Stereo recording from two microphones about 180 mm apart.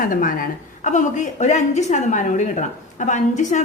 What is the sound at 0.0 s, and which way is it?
A woman's voice, 50° left (ahead or behind).